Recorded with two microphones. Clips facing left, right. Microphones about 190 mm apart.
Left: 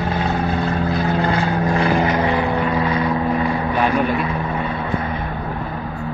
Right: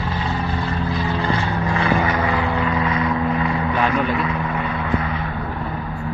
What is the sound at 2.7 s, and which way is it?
Vehicle, 35° left (ahead or behind).